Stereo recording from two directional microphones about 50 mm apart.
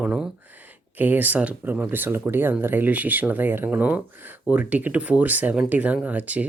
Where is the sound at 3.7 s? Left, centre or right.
Right.